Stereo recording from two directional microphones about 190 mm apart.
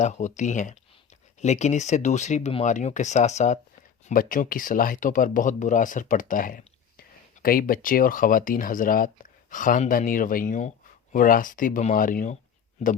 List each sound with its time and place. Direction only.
0.0 s speech: 40° left (ahead or behind)